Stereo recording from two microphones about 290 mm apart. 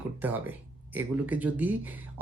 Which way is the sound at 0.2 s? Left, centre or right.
Centre.